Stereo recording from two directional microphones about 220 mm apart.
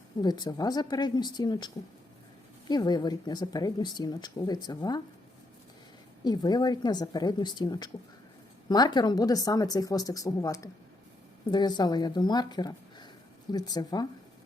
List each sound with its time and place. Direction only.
0.2 s speech: 20° left (ahead or behind)
6.2 s speech: 20° left (ahead or behind)